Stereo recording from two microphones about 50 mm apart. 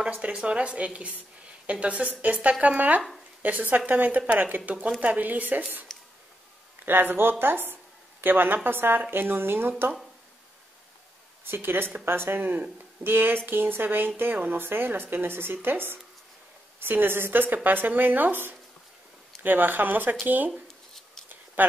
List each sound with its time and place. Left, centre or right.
0.0 s speech: right
6.8 s a woman's voice: right
11.4 s a woman's voice: right
20.6 s a sound: centre
21.6 s speech: right